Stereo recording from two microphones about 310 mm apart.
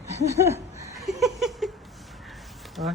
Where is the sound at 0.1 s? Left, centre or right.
Centre.